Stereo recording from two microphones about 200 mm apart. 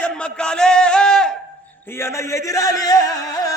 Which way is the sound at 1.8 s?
10° left (ahead or behind).